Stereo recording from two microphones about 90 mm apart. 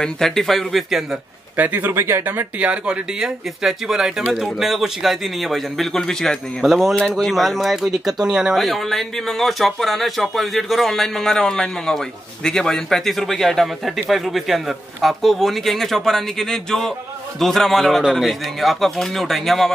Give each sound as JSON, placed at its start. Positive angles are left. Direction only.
{"t": 0.0, "sound": "speech", "side_deg": 5}
{"t": 1.6, "sound": "speech", "side_deg": -20}
{"t": 2.7, "sound": "speech", "side_deg": -10}